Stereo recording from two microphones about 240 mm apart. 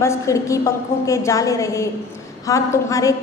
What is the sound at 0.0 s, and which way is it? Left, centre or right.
A woman's voice, centre.